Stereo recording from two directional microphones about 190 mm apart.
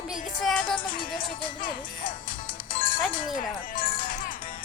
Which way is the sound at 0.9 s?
50° left (ahead or behind).